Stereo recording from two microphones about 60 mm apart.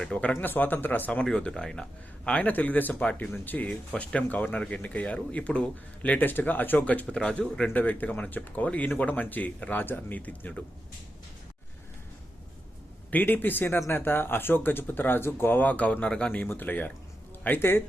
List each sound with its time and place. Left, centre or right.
0.0 s speech: centre
0.3 s speech: left
1.3 s speech: centre
2.4 s speech: left
3.0 s speech: left
3.3 s speech: left
3.7 s speech: left
7.7 s speech: left
13.1 s speech: left; by 16.3 s centre
16.3 s speech: left